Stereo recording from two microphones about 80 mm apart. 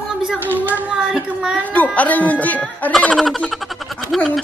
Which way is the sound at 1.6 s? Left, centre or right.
Centre.